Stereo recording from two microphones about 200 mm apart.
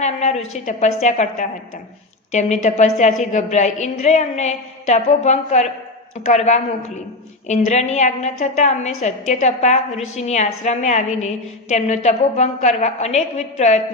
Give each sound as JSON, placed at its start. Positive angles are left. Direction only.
{"t": 0.0, "sound": "a woman's voice", "side_deg": 35}